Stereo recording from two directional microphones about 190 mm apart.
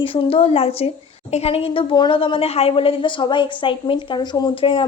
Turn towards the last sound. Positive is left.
turn(degrees=30)  # may be behind; listen again after turning